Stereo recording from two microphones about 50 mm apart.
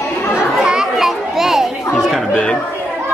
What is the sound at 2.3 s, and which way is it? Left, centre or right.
Speech, centre.